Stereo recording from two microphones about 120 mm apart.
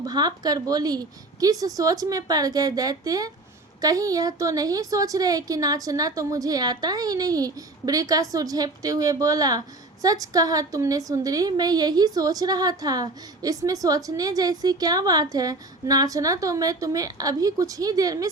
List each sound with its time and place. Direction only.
0.0 s a woman's voice: 35° right (ahead or behind)